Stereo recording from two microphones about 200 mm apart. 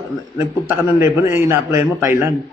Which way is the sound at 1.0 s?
15° right (ahead or behind).